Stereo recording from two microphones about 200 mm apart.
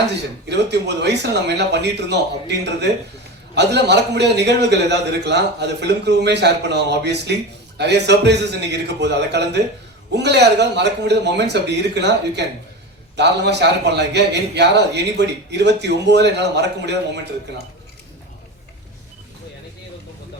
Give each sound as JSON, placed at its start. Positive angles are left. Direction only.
{"t": 0.4, "sound": "a man's voice", "side_deg": -60}